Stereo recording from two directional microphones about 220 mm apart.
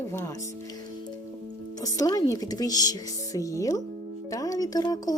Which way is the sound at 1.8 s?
15° left (ahead or behind).